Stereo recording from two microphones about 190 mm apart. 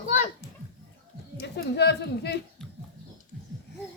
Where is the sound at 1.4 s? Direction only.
60° left (ahead or behind).